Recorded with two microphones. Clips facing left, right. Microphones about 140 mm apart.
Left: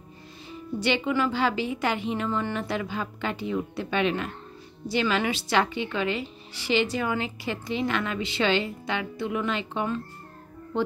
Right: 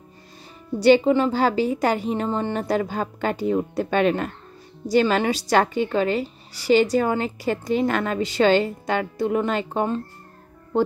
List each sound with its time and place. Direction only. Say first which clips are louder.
0.7 s speech: right 9 dB; 40° right (ahead or behind)